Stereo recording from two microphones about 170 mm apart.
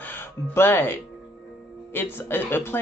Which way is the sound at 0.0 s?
10° left (ahead or behind).